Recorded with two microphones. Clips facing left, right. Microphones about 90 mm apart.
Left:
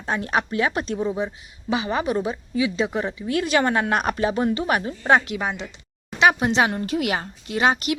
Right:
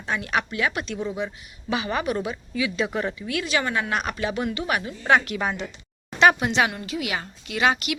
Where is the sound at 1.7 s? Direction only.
20° left (ahead or behind).